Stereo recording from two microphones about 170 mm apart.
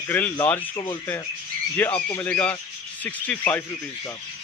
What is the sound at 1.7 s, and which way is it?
A man's voice, 10° left (ahead or behind).